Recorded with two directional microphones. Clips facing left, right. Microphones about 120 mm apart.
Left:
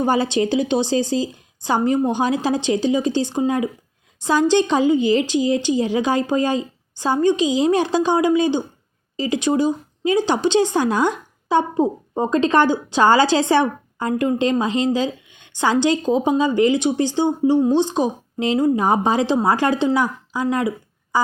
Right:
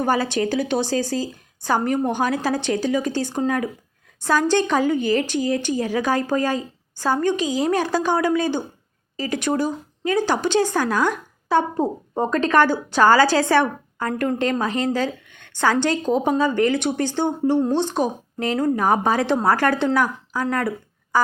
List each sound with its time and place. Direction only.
0.0 s a woman's voice: 20° left (ahead or behind)